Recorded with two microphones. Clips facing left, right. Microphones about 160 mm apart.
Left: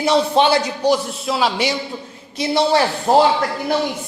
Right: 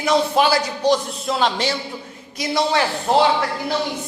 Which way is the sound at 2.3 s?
30° left (ahead or behind).